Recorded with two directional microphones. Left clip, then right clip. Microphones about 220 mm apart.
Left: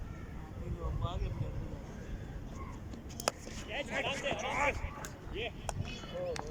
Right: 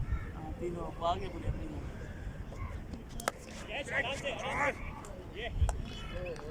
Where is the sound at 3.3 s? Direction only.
Centre (ahead or behind).